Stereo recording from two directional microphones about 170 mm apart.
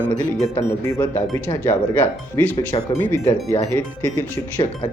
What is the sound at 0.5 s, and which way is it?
Speech, 15° left (ahead or behind).